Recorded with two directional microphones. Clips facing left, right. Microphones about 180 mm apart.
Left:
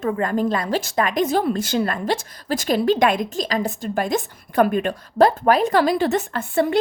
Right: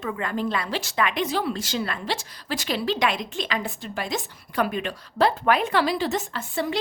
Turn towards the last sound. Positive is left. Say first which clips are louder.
# left 7 dB
turn(degrees=55)  # may be behind; listen again after turning